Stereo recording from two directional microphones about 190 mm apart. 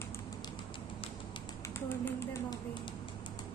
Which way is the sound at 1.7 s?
15° left (ahead or behind).